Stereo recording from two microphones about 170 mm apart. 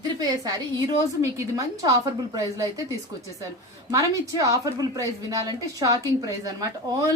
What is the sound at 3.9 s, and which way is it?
Speech, 20° right (ahead or behind).